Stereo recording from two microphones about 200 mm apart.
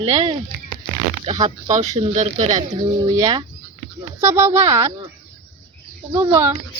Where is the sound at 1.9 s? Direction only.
30° right (ahead or behind).